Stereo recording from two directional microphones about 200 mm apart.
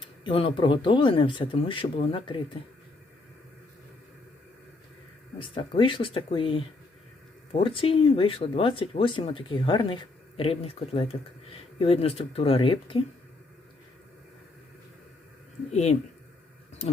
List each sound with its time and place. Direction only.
0.0 s speech: 25° left (ahead or behind)
5.4 s speech: 25° left (ahead or behind)
15.7 s speech: 35° left (ahead or behind)